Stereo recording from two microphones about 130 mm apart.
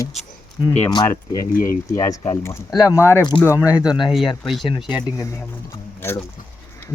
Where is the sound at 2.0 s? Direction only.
30° left (ahead or behind).